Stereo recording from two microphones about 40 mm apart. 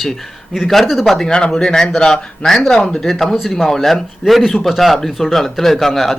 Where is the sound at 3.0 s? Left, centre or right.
Centre.